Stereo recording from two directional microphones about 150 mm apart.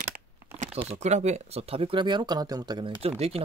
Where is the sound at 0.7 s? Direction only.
45° right (ahead or behind).